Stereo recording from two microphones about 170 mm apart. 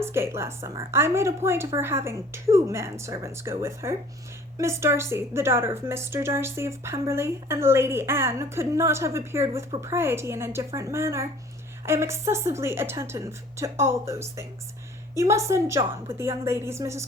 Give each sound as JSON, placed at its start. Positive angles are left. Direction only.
{"t": 0.0, "sound": "a woman's voice", "side_deg": -15}